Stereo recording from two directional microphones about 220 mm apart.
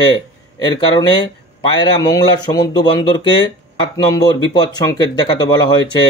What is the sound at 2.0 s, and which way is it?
A man's voice, 15° left (ahead or behind).